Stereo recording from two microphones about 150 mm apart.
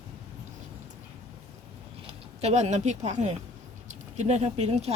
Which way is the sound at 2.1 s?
45° right (ahead or behind).